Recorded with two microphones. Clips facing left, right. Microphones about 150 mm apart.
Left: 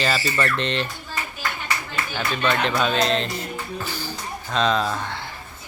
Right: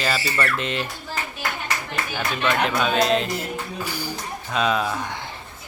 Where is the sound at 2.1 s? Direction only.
5° right (ahead or behind).